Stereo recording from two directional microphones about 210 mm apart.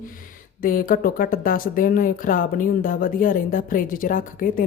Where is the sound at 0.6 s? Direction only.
40° left (ahead or behind).